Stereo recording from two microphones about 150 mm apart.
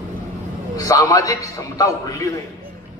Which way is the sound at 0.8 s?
20° left (ahead or behind).